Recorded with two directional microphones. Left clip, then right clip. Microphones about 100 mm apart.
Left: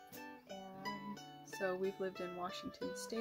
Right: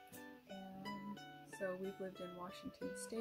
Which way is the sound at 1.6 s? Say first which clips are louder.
Left 6 dB; 15° left (ahead or behind).